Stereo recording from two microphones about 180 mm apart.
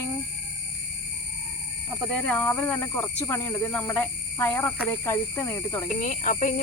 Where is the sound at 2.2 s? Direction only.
5° left (ahead or behind).